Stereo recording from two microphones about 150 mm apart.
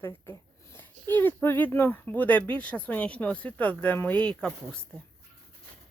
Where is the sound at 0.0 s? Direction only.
15° left (ahead or behind).